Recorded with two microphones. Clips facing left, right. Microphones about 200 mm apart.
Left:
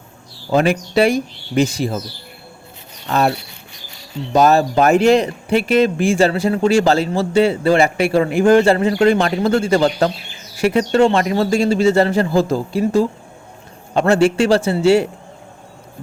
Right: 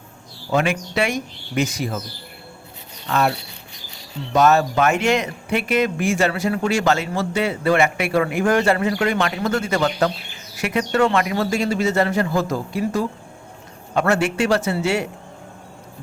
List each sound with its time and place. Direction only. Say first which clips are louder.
0.5 s speech: left 5 dB; 35° left (ahead or behind)
3.1 s speech: left 3 dB; 35° left (ahead or behind)
4.4 s a man's voice: left 3 dB; 35° left (ahead or behind)